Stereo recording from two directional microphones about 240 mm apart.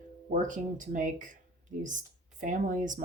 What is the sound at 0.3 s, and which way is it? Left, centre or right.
Speech, right.